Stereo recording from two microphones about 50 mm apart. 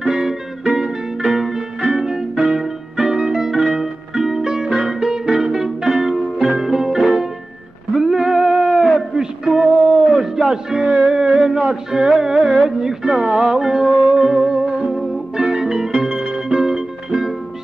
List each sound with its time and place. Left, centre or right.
0.0 s music: centre
8.7 s a sound: centre
9.1 s music: centre
10.1 s a sound: centre
11.1 s music: right
11.3 s music: centre